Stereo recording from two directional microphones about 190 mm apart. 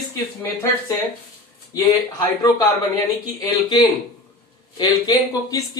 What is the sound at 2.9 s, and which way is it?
Speech, 20° left (ahead or behind).